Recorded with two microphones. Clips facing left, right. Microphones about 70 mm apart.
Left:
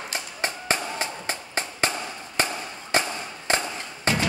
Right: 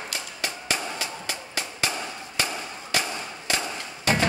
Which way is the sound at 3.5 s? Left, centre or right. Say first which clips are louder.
Left 4 dB; left.